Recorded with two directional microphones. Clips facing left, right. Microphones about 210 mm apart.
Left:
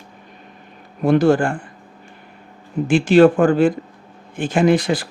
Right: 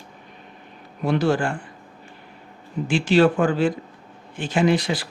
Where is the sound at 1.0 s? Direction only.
50° left (ahead or behind).